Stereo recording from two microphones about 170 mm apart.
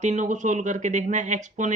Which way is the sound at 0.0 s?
45° right (ahead or behind).